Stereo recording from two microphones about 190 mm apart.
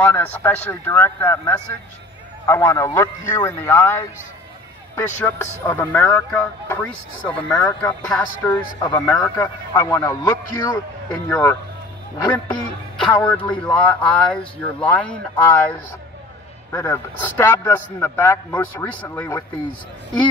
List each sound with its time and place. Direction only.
0.0 s a man's voice: 10° left (ahead or behind)
12.9 s a man's voice: 5° left (ahead or behind)
16.7 s a man's voice: 15° left (ahead or behind)